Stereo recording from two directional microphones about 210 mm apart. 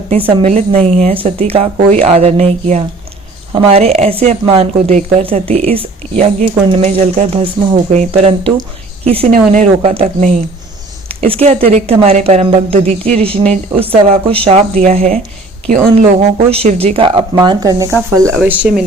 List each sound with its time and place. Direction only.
0.1 s speech: 25° right (ahead or behind)
18.3 s speech: 5° right (ahead or behind)